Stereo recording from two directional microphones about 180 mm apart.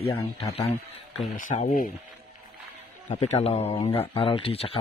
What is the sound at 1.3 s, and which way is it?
Speech, 45° left (ahead or behind).